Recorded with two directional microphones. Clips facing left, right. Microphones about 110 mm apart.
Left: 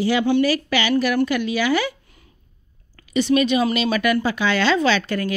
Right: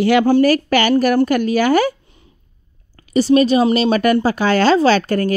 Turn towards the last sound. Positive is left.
turn(degrees=-45)  # may be behind; listen again after turning